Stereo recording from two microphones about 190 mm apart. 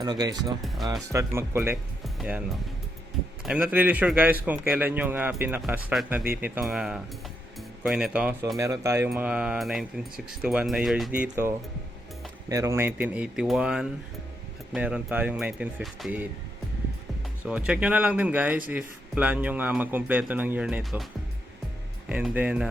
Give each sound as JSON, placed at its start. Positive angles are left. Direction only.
{"t": 0.0, "sound": "a man's voice", "side_deg": -20}
{"t": 3.4, "sound": "a man's voice", "side_deg": -5}
{"t": 17.4, "sound": "a man's voice", "side_deg": -5}
{"t": 22.1, "sound": "speech", "side_deg": -5}